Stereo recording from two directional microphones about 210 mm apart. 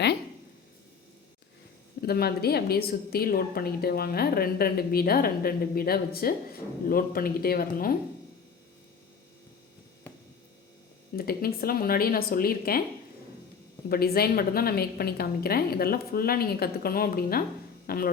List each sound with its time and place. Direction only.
2.0 s a woman's voice: 50° left (ahead or behind)
11.2 s a woman's voice: 45° left (ahead or behind)
13.9 s a woman's voice: 45° left (ahead or behind)